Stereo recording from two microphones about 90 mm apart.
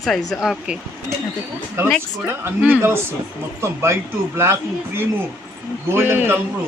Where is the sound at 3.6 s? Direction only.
30° right (ahead or behind).